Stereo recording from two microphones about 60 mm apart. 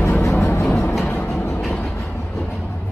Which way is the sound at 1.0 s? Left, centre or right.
Left.